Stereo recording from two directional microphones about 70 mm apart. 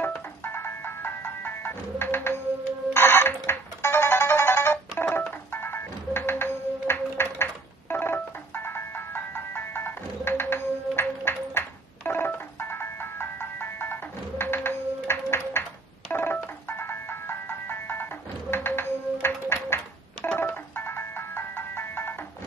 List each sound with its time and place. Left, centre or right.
0.0 s ice cream truck: left
2.9 s music: left